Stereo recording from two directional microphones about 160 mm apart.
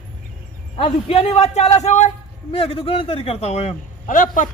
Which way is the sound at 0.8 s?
40° left (ahead or behind).